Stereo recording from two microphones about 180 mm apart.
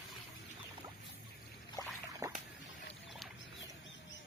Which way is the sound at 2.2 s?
20° right (ahead or behind).